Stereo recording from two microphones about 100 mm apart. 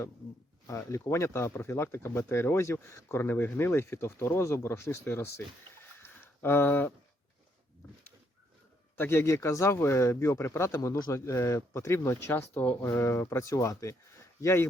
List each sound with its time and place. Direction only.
0.7 s speech: 30° left (ahead or behind)
9.0 s speech: 25° left (ahead or behind)